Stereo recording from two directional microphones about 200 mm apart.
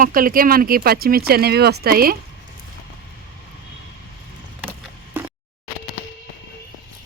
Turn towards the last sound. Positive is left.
turn(degrees=-10)  # may be behind; listen again after turning